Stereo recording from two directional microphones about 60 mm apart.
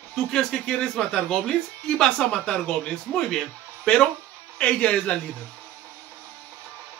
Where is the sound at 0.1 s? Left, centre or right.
Centre.